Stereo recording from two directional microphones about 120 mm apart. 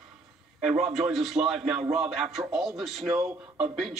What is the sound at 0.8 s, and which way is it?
Speech, centre (ahead or behind).